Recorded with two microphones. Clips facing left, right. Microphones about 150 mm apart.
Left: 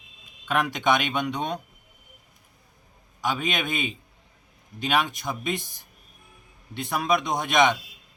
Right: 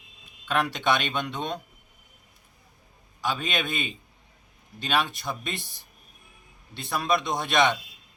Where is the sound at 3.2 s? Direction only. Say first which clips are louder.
Left 2 dB; 15° left (ahead or behind).